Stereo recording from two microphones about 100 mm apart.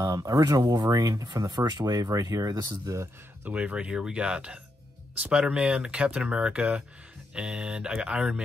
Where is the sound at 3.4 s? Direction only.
15° right (ahead or behind).